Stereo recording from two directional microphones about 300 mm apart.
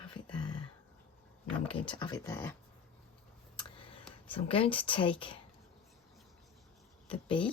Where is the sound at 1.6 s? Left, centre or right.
Centre.